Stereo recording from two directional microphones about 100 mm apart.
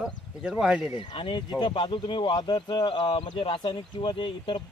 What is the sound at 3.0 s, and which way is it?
Speech, 65° left (ahead or behind).